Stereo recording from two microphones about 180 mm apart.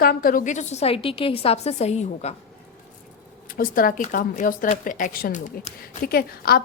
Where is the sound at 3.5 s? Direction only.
50° left (ahead or behind).